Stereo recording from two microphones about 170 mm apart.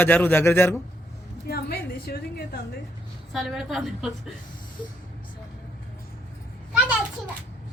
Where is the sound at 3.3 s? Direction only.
Centre (ahead or behind).